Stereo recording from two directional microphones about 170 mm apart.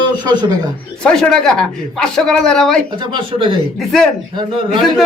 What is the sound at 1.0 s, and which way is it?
Speech, 5° left (ahead or behind).